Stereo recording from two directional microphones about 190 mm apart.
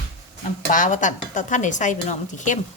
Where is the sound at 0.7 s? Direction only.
40° left (ahead or behind).